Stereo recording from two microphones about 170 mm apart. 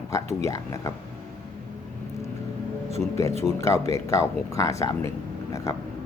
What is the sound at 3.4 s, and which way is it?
Speech, 15° left (ahead or behind).